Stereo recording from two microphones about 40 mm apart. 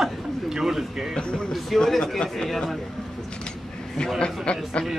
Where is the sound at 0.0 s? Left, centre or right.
Centre.